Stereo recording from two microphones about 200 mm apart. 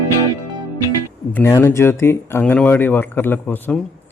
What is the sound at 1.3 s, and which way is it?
Speech, 10° left (ahead or behind).